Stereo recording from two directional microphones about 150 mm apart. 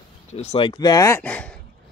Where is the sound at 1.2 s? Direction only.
10° left (ahead or behind).